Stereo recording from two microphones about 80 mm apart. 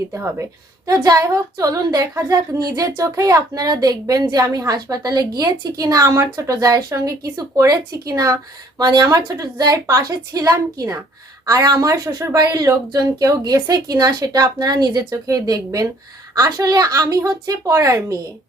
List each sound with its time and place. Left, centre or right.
0.1 s a woman's voice: right
0.9 s speech: right